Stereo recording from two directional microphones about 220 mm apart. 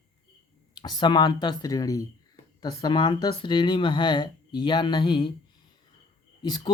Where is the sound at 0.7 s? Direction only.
20° left (ahead or behind).